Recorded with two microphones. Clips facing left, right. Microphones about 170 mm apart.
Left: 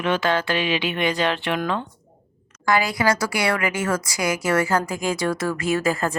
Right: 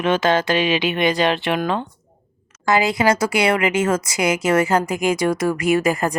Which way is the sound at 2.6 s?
25° right (ahead or behind).